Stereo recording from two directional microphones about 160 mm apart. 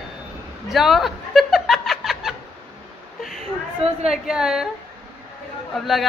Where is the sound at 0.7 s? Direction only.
Centre (ahead or behind).